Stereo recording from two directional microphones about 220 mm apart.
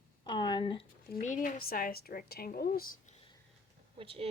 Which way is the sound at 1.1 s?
35° left (ahead or behind).